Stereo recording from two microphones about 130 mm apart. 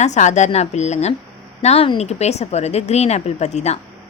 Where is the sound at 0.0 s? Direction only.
65° left (ahead or behind).